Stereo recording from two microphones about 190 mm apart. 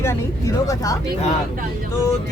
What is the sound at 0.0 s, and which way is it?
Speech, 15° left (ahead or behind).